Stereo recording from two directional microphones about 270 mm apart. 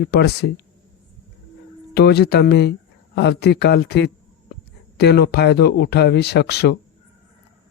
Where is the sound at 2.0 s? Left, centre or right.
Left.